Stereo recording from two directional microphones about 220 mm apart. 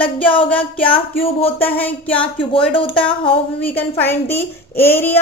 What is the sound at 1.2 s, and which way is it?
Speech, 25° left (ahead or behind).